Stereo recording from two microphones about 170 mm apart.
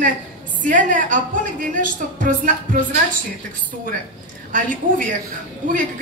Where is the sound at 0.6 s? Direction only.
50° right (ahead or behind).